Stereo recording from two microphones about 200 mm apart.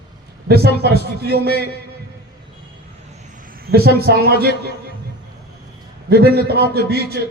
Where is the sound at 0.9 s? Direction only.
50° right (ahead or behind).